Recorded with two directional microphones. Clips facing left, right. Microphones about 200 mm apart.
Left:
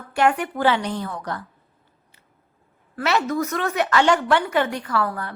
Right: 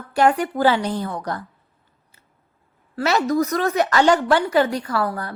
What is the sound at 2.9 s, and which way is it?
A woman's voice, 40° right (ahead or behind).